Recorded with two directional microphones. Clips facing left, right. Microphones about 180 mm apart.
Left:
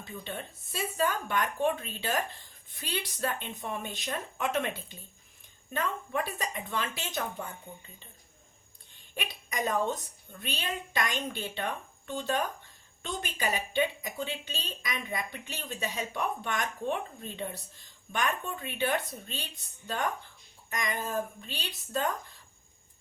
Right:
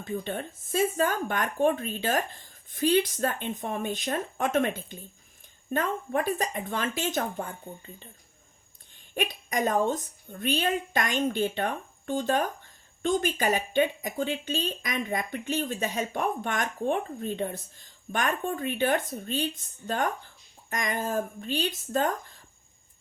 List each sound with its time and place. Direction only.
0.0 s speech: 45° right (ahead or behind)
9.1 s speech: 50° right (ahead or behind)
20.7 s speech: 50° right (ahead or behind)